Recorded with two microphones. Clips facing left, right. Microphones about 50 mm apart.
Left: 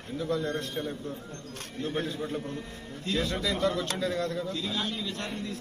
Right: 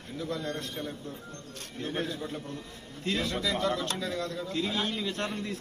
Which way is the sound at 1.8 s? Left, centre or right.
Right.